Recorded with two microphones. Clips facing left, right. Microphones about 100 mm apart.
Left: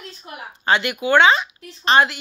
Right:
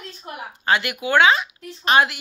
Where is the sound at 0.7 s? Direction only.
5° right (ahead or behind).